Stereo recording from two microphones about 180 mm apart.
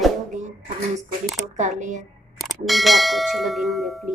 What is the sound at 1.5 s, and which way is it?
Speech, 40° right (ahead or behind).